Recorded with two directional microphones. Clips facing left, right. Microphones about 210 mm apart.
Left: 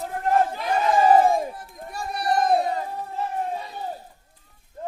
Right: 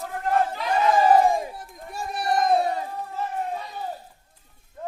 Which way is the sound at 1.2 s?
Centre (ahead or behind).